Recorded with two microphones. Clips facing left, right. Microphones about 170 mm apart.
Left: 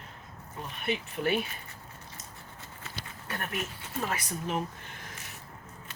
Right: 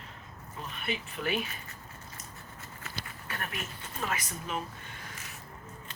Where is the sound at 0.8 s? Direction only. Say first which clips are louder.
Left 4 dB; 50° left (ahead or behind).